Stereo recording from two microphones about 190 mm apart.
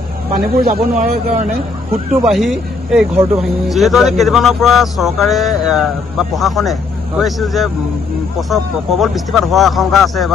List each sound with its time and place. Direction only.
0.3 s speech: 45° right (ahead or behind)
2.2 s speech: centre (ahead or behind)